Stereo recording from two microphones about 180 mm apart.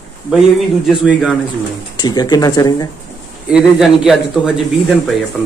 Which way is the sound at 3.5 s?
Centre (ahead or behind).